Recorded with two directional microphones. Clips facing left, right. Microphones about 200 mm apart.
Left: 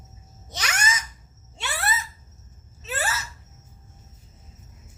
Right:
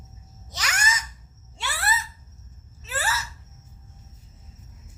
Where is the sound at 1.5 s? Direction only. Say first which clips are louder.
Even; 20° left (ahead or behind).